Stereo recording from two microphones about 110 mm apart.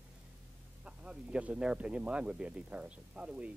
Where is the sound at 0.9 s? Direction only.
10° right (ahead or behind).